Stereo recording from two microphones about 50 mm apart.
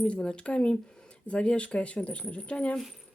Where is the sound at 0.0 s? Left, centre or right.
Left.